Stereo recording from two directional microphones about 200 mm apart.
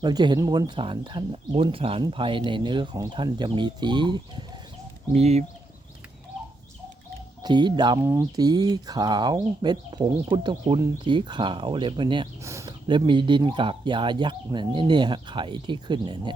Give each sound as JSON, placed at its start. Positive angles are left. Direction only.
{"t": 0.0, "sound": "speech", "side_deg": -20}
{"t": 7.4, "sound": "speech", "side_deg": -20}